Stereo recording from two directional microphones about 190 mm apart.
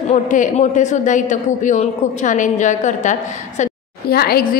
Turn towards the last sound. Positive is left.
turn(degrees=55)  # may be behind; listen again after turning